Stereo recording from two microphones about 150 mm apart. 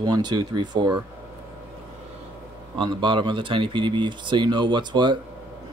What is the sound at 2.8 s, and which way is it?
Speech, 35° right (ahead or behind).